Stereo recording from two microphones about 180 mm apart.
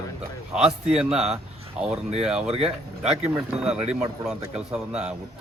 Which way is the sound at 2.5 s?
35° right (ahead or behind).